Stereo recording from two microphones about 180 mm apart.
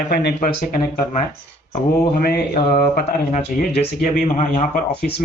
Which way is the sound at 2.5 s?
30° left (ahead or behind).